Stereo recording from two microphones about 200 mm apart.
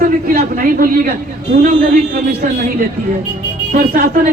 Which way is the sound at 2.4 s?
40° right (ahead or behind).